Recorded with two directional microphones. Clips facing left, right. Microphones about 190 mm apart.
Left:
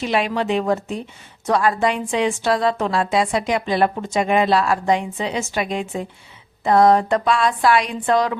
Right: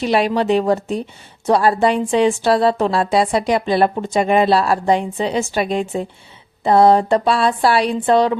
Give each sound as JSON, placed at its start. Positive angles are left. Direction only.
{"t": 0.0, "sound": "a woman's voice", "side_deg": -35}